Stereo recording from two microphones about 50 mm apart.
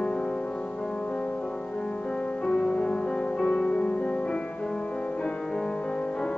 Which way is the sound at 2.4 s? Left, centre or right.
Left.